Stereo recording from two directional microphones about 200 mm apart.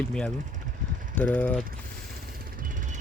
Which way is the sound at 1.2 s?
10° left (ahead or behind).